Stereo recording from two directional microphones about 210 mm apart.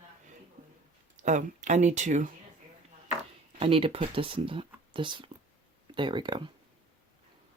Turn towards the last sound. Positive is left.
turn(degrees=-20)  # may be behind; listen again after turning